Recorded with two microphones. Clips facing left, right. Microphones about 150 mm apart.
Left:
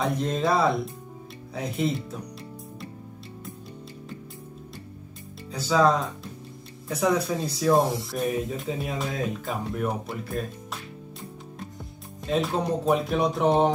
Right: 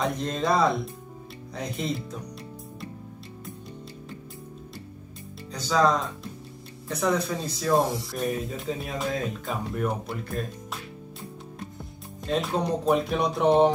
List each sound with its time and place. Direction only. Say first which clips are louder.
0.0 s speech: left 2 dB; 5° left (ahead or behind)
5.5 s speech: left 1 dB; 5° left (ahead or behind)
11.8 s speech: even; centre (ahead or behind)